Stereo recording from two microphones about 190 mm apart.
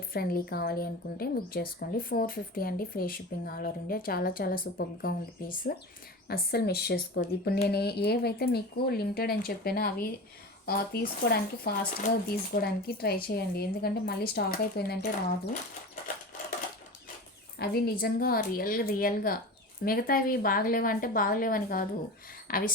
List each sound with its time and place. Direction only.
0.1 s a woman's voice: 50° left (ahead or behind)
17.6 s a woman's voice: 55° left (ahead or behind)